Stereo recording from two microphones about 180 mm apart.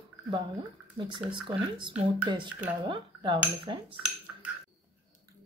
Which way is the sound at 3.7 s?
25° right (ahead or behind).